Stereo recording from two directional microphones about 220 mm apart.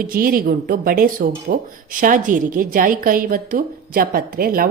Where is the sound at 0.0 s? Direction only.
40° right (ahead or behind).